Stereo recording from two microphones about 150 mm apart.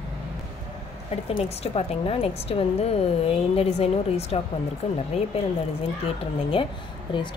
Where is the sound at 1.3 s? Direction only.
40° left (ahead or behind).